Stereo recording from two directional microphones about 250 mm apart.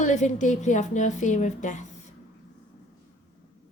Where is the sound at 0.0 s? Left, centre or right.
Left.